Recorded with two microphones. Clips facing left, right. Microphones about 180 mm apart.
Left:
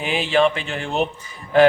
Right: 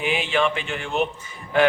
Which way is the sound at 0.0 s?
35° left (ahead or behind).